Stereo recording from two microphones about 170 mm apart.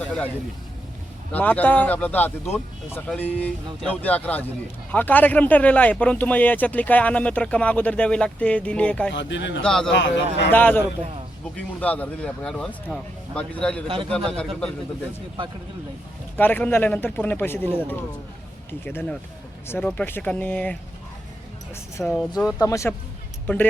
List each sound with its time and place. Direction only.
0.0 s a sound: 5° left (ahead or behind)
1.3 s speech: 10° left (ahead or behind)
9.1 s a man's voice: 90° left
9.6 s speech: 5° left (ahead or behind)
9.9 s a man's voice: 90° left
10.5 s speech: 10° left (ahead or behind)
13.8 s a man's voice: 30° right (ahead or behind)
14.3 s speech: 5° left (ahead or behind)
16.4 s speech: 10° left (ahead or behind)
22.0 s speech: 10° left (ahead or behind)